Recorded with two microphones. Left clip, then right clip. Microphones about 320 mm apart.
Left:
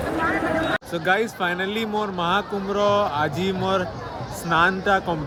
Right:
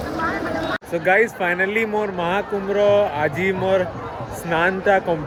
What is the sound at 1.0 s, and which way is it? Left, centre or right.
Speech, centre.